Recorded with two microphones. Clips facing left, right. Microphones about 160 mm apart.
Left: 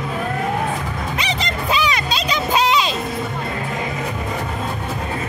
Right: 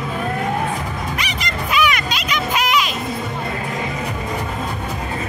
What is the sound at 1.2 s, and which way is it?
Music, 30° left (ahead or behind).